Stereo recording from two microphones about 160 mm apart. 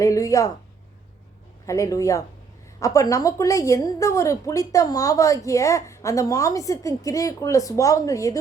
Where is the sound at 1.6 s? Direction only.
20° left (ahead or behind).